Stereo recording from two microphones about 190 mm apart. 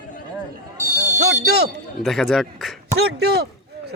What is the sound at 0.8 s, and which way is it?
Speech, 40° right (ahead or behind).